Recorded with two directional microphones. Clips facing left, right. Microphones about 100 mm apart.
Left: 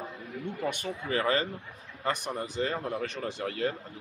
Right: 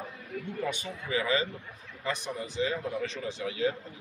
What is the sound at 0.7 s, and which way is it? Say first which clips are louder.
A man's voice: left 5 dB; 50° left (ahead or behind).